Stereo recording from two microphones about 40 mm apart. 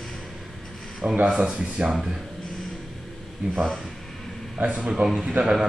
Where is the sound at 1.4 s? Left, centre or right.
Right.